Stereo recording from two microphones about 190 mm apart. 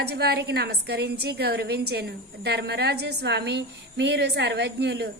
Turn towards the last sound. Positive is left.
turn(degrees=-60)  # may be behind; listen again after turning